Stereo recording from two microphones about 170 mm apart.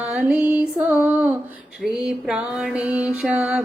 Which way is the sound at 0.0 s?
5° right (ahead or behind).